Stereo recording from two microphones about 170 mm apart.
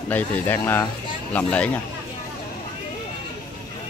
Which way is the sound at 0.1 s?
10° left (ahead or behind).